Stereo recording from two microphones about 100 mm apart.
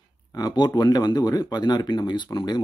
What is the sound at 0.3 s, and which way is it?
Speech, 40° left (ahead or behind).